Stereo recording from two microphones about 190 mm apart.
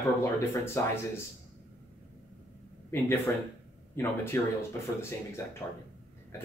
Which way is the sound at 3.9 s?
15° left (ahead or behind).